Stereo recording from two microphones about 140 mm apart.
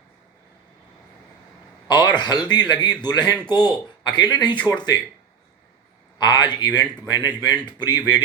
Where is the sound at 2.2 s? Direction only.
30° left (ahead or behind).